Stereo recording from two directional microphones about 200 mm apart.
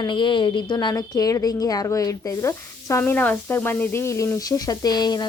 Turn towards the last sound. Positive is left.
turn(degrees=20)  # may be behind; listen again after turning